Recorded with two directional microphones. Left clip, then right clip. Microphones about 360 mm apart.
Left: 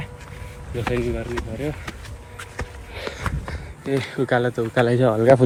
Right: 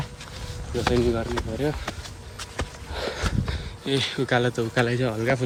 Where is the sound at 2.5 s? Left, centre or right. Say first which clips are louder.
Right 2 dB; centre.